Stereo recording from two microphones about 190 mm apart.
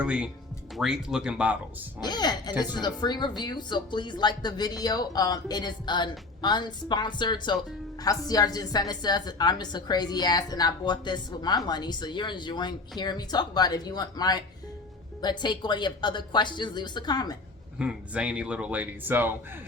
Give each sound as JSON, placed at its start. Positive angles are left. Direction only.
{"t": 0.0, "sound": "speech", "side_deg": -5}
{"t": 2.0, "sound": "speech", "side_deg": 20}
{"t": 17.7, "sound": "speech", "side_deg": -5}